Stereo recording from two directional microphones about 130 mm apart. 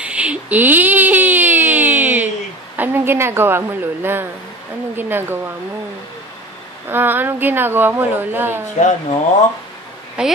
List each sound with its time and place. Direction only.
0.0 s a sound: 10° right (ahead or behind)
2.8 s a woman's voice: 15° right (ahead or behind)
6.9 s a woman's voice: 15° right (ahead or behind)
8.7 s speech: 65° left (ahead or behind)
10.2 s a woman's voice: 5° right (ahead or behind)